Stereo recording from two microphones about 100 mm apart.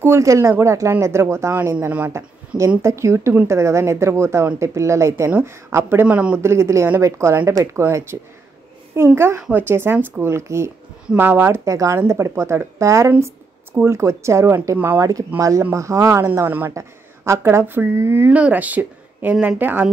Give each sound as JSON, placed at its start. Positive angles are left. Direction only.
{"t": 0.0, "sound": "speech", "side_deg": -30}
{"t": 6.0, "sound": "speech", "side_deg": -10}
{"t": 6.3, "sound": "speech", "side_deg": -25}
{"t": 16.3, "sound": "speech", "side_deg": -20}